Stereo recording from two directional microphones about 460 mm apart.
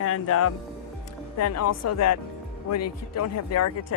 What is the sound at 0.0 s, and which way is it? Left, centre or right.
Speech, left.